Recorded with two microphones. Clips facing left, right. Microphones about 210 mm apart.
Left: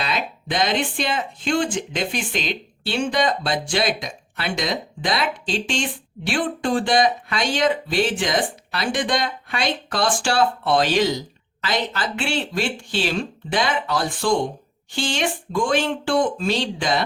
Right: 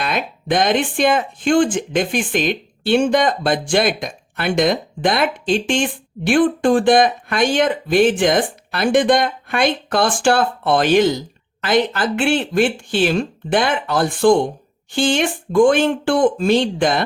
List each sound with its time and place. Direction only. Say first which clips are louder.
0.0 s speech: right 4 dB; 55° right (ahead or behind)